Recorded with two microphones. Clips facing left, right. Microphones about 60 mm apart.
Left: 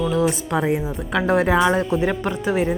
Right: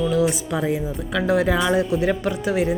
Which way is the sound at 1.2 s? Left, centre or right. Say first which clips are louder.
Left 2 dB; left.